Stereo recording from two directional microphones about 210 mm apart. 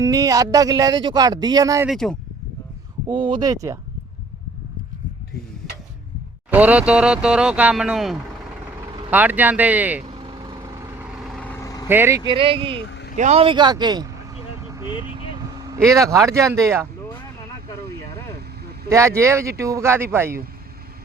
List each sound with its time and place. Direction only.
0.0 s speech: 15° right (ahead or behind)
1.9 s speech: centre (ahead or behind)
3.1 s a man's voice: 20° right (ahead or behind)
6.5 s speech: 5° right (ahead or behind)
10.1 s vehicle: 25° right (ahead or behind); by 11.9 s 15° left (ahead or behind)
11.9 s speech: 10° right (ahead or behind)
12.3 s a man's voice: 25° right (ahead or behind)
12.9 s vehicle: 55° left (ahead or behind)
13.1 s a man's voice: 30° right (ahead or behind)
14.7 s vehicle: 10° right (ahead or behind)
15.4 s speech: 15° right (ahead or behind)
18.9 s speech: 15° right (ahead or behind)